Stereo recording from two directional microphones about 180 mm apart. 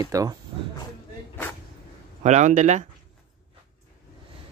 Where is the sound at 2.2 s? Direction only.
40° right (ahead or behind).